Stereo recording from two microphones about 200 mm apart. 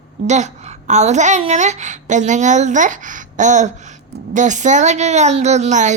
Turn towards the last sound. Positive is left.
turn(degrees=-35)  # may be behind; listen again after turning